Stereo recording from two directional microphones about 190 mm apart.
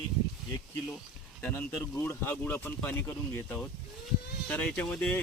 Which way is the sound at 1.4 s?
10° left (ahead or behind).